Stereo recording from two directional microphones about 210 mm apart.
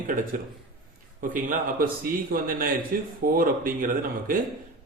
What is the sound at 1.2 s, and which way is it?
A man's voice, 40° right (ahead or behind).